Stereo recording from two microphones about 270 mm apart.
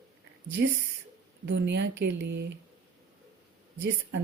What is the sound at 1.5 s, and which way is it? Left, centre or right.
Speech, right.